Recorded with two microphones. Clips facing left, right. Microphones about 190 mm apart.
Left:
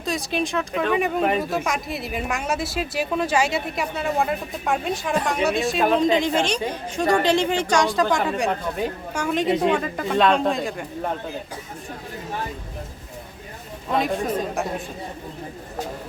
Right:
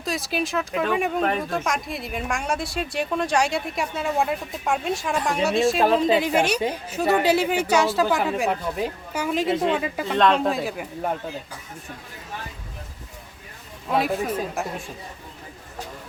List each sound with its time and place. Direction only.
0.0 s speech: centre (ahead or behind)
9.5 s speech: 15° left (ahead or behind)
9.8 s speech: 5° right (ahead or behind)
13.9 s speech: 5° right (ahead or behind)